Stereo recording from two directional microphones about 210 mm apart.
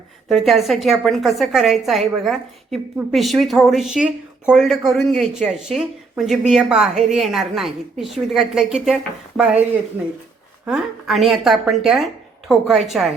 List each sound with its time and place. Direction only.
0.3 s a woman's voice: centre (ahead or behind)
10.7 s a woman's voice: centre (ahead or behind)